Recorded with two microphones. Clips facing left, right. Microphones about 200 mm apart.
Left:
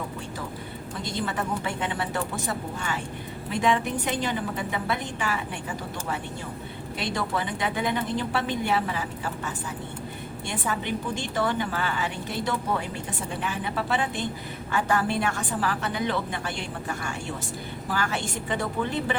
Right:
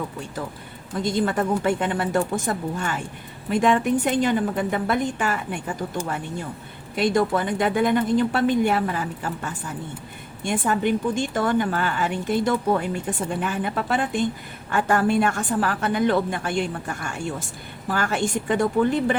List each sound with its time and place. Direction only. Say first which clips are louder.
1.2 s a woman's voice: right 7 dB; 50° right (ahead or behind)